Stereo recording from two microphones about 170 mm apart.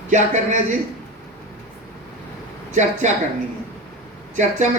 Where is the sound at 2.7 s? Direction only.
45° right (ahead or behind).